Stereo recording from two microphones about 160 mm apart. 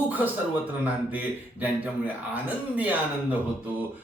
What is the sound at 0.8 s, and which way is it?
A man's voice, 10° right (ahead or behind).